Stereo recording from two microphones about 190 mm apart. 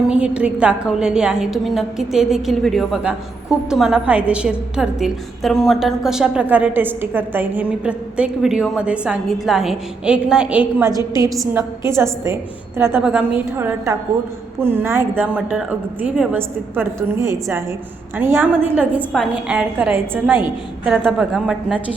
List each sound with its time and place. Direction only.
0.1 s a woman's voice: 5° right (ahead or behind)
18.2 s a woman's voice: 10° right (ahead or behind)